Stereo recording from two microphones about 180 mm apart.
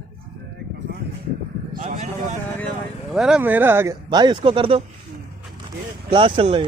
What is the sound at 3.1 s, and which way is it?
Speech, 5° right (ahead or behind).